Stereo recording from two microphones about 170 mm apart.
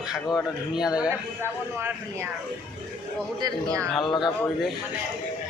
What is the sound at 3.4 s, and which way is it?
Speech, 20° right (ahead or behind).